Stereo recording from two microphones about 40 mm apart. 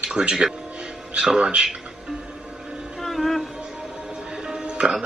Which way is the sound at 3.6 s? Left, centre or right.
Centre.